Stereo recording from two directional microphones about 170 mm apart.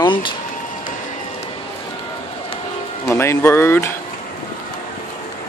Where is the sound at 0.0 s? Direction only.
30° left (ahead or behind).